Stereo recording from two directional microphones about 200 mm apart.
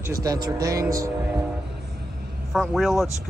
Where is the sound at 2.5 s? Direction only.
Centre (ahead or behind).